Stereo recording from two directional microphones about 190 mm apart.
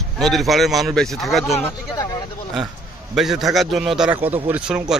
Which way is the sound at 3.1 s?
Centre (ahead or behind).